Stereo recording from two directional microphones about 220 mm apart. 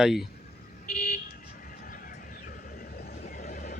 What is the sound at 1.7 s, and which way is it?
Neigh, 40° left (ahead or behind).